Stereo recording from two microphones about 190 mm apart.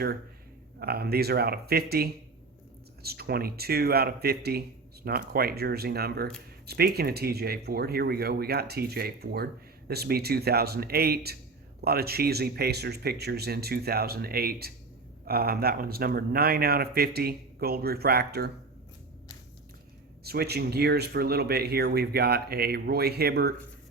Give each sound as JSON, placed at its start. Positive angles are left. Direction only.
{"t": 0.8, "sound": "speech", "side_deg": -55}
{"t": 20.2, "sound": "speech", "side_deg": -55}